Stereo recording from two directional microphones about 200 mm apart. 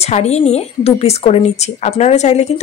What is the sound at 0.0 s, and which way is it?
Speech, 35° left (ahead or behind).